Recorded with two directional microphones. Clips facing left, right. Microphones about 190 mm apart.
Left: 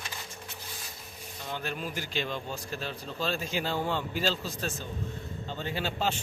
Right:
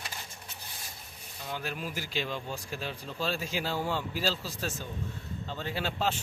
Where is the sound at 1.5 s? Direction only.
5° right (ahead or behind).